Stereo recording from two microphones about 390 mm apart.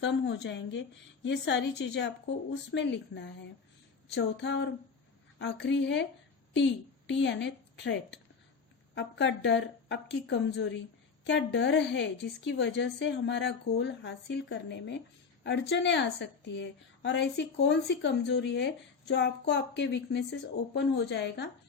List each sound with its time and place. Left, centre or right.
0.0 s a woman's voice: left
7.1 s a woman's voice: left